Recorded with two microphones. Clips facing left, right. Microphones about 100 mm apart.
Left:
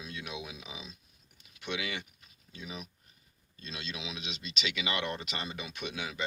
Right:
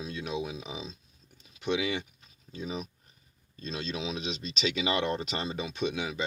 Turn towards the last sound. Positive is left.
turn(degrees=-25)  # may be behind; listen again after turning